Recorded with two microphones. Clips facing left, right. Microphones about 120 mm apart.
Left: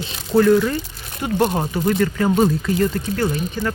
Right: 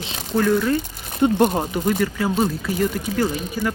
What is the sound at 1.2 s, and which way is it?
Speech, 25° right (ahead or behind).